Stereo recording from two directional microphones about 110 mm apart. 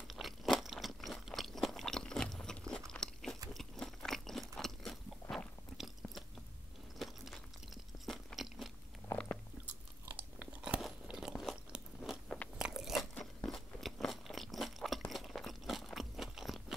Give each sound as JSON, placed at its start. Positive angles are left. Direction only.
{"t": 0.1, "sound": "crunch", "side_deg": 0}
{"t": 5.8, "sound": "biting", "side_deg": 0}
{"t": 7.0, "sound": "a sound", "side_deg": 0}
{"t": 9.1, "sound": "biting", "side_deg": 25}
{"t": 10.4, "sound": "crunch", "side_deg": -5}